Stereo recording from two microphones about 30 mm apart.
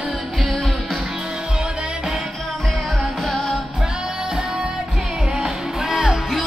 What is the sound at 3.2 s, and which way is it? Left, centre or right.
Music, centre.